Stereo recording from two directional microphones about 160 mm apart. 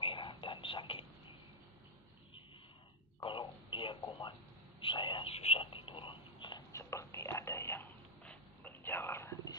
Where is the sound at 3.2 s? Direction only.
30° left (ahead or behind).